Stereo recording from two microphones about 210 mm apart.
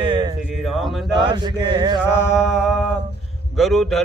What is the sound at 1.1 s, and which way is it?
Speech, 20° right (ahead or behind).